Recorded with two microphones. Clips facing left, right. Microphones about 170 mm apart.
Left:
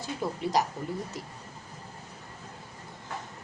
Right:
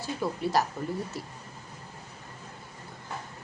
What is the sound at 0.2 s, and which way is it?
Speech, 20° left (ahead or behind).